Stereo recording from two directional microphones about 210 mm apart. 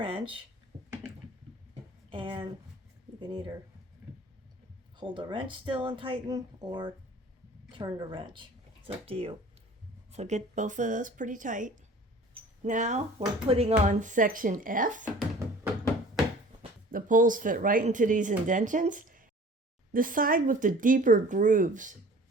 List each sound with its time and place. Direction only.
0.0 s speech: 25° right (ahead or behind)
2.0 s speech: 25° right (ahead or behind)
4.9 s speech: 25° right (ahead or behind); by 15.0 s 40° right (ahead or behind)
16.9 s speech: 40° right (ahead or behind)